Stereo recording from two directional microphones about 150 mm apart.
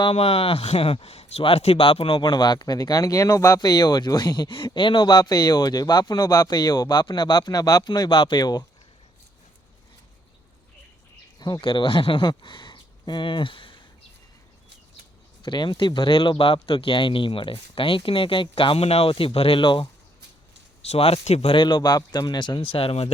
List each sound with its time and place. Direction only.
0.0 s speech: 40° left (ahead or behind)
11.3 s speech: 25° left (ahead or behind)
15.4 s speech: 30° left (ahead or behind)